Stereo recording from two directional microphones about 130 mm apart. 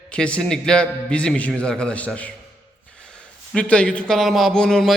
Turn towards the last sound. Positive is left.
turn(degrees=5)  # may be behind; listen again after turning